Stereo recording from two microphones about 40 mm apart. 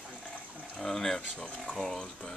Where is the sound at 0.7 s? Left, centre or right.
Centre.